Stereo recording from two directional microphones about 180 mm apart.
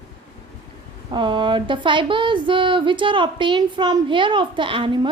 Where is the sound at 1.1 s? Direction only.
25° right (ahead or behind).